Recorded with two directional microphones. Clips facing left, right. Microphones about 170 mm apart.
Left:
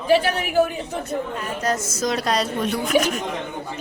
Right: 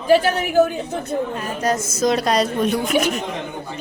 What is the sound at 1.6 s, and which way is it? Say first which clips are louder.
A woman's voice: right 5 dB; 15° right (ahead or behind).